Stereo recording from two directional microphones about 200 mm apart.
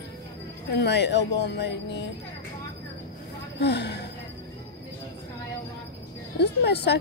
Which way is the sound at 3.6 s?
55° left (ahead or behind).